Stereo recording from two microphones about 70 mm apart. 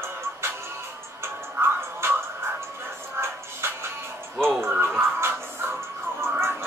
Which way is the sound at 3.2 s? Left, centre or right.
Right.